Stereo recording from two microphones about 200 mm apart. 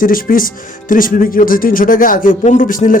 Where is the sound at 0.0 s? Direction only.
45° left (ahead or behind).